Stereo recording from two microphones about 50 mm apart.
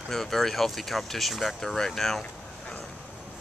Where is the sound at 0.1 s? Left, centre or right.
Centre.